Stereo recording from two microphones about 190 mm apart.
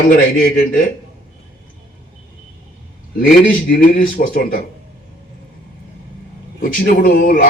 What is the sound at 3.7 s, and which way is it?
Speech, 50° left (ahead or behind).